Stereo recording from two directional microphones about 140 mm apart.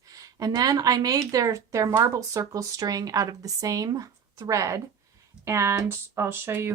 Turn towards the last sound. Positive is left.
turn(degrees=-15)  # may be behind; listen again after turning